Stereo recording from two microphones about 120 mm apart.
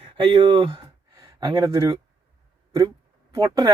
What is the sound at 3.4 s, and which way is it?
Speech, 30° right (ahead or behind).